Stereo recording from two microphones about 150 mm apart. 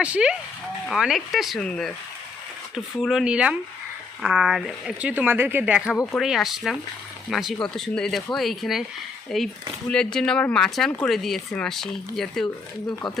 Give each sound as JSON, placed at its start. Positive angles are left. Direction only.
{"t": 0.0, "sound": "speech", "side_deg": -5}